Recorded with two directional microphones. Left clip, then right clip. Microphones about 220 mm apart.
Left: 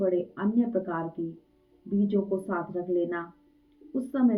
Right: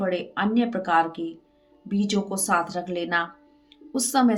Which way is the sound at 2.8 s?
45° right (ahead or behind).